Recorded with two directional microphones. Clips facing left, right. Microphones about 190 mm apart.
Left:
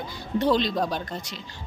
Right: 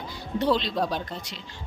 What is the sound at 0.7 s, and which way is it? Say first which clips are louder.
Speech: even; 5° right (ahead or behind).